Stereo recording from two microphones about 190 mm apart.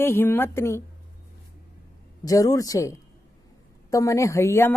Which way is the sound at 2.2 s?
20° left (ahead or behind).